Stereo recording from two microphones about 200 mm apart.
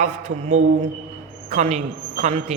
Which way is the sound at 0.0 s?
35° right (ahead or behind).